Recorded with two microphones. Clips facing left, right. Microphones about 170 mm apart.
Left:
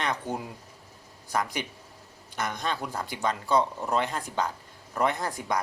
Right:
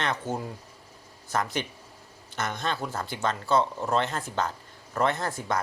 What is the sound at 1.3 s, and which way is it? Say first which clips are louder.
Speech: right 1 dB; 10° left (ahead or behind).